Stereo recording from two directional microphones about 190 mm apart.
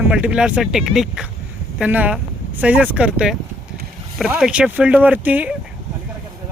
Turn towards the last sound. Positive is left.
turn(degrees=-10)  # may be behind; listen again after turning